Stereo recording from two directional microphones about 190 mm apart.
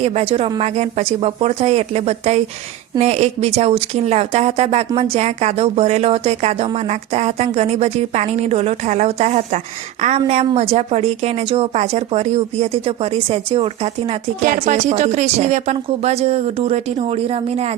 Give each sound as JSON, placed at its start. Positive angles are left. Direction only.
{"t": 0.0, "sound": "a woman's voice", "side_deg": -30}
{"t": 14.4, "sound": "a woman's voice", "side_deg": -40}